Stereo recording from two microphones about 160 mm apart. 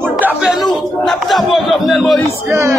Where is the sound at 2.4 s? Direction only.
15° right (ahead or behind).